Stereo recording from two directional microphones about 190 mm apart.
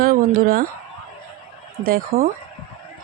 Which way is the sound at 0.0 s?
50° right (ahead or behind).